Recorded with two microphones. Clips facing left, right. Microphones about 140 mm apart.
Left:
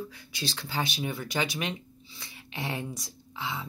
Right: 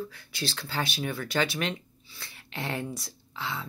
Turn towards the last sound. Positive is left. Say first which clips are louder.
# even
turn(degrees=20)  # may be behind; listen again after turning